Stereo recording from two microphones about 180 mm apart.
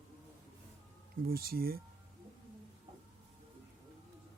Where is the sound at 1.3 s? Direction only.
55° right (ahead or behind).